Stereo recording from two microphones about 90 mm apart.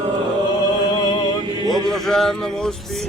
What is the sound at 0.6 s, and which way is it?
Music, 50° left (ahead or behind).